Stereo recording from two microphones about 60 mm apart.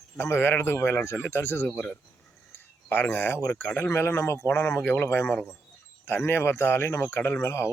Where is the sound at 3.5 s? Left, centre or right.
Left.